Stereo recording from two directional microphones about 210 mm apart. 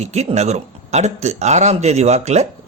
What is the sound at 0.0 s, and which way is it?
A man's voice, 30° right (ahead or behind).